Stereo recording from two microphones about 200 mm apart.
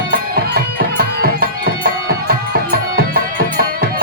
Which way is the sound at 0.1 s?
50° right (ahead or behind).